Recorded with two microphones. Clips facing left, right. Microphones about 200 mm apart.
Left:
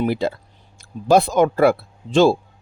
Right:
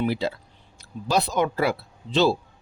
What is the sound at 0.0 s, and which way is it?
Speech, 50° left (ahead or behind).